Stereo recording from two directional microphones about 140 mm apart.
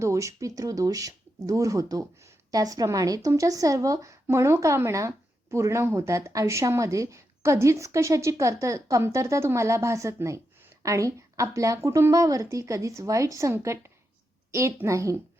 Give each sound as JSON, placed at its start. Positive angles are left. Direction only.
{"t": 0.0, "sound": "speech", "side_deg": -20}